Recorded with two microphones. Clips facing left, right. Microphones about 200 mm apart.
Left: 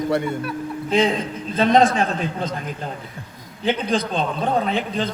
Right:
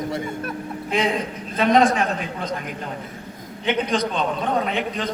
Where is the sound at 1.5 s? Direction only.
30° left (ahead or behind).